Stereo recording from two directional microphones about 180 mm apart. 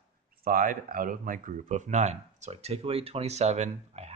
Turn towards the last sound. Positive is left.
turn(degrees=-35)  # may be behind; listen again after turning